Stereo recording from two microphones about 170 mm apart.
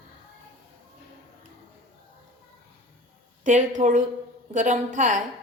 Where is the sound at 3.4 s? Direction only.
45° right (ahead or behind).